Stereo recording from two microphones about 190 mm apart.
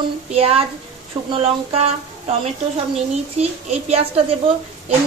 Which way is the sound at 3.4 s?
35° right (ahead or behind).